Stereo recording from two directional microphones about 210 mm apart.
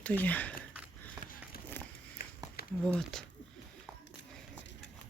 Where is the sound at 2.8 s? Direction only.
Centre (ahead or behind).